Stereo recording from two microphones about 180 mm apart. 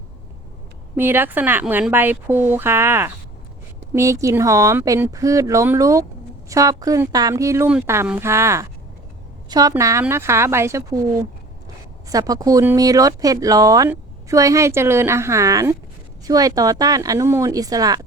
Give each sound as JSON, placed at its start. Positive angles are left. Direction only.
{"t": 0.9, "sound": "speech", "side_deg": -10}
{"t": 12.0, "sound": "speech", "side_deg": -20}